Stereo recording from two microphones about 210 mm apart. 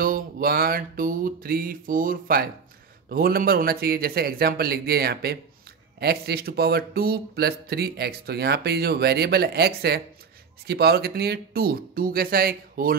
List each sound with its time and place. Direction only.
0.0 s speech: 45° right (ahead or behind)